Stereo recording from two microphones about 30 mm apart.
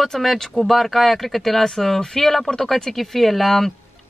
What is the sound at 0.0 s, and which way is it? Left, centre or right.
Speech, centre.